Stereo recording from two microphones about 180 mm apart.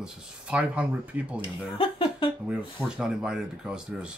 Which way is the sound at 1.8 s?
30° left (ahead or behind).